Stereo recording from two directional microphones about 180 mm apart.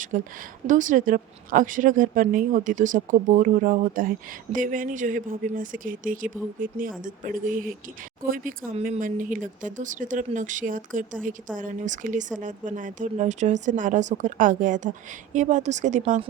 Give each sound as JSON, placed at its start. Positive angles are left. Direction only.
{"t": 0.1, "sound": "speech", "side_deg": -50}
{"t": 8.8, "sound": "speech", "side_deg": -50}